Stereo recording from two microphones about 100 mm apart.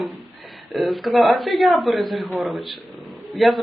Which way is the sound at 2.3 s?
15° right (ahead or behind).